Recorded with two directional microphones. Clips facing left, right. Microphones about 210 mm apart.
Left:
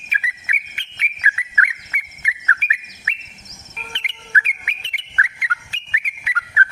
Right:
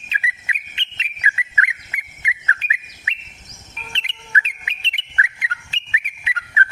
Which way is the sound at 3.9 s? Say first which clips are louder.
Even; 25° right (ahead or behind).